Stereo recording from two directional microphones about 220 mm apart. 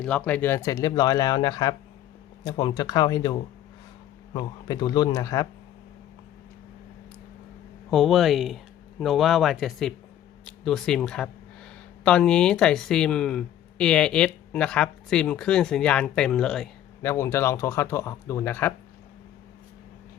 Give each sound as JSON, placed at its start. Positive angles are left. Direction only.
{"t": 0.0, "sound": "speech", "side_deg": 5}
{"t": 4.4, "sound": "speech", "side_deg": 20}
{"t": 7.9, "sound": "speech", "side_deg": 0}